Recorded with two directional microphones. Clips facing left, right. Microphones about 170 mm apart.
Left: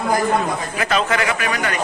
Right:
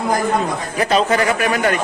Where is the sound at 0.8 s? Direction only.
35° right (ahead or behind).